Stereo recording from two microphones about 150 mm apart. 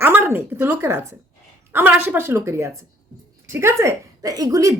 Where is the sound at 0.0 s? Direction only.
15° right (ahead or behind).